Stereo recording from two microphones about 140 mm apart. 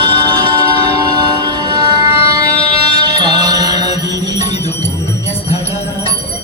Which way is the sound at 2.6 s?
45° left (ahead or behind).